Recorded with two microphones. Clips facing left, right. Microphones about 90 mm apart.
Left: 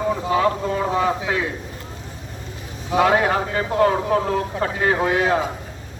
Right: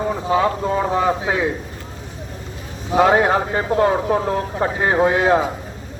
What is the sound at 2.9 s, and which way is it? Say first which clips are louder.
A man's voice: right 3 dB; 25° right (ahead or behind).